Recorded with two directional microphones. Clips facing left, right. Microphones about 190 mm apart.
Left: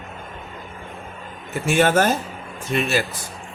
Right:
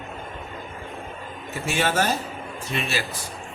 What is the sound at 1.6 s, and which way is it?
A man's voice, 50° left (ahead or behind).